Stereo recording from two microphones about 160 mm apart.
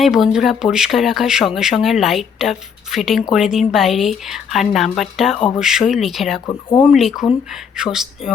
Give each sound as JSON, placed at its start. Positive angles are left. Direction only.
{"t": 0.0, "sound": "speech", "side_deg": 0}
{"t": 6.4, "sound": "speech", "side_deg": 15}
{"t": 6.9, "sound": "speech", "side_deg": 0}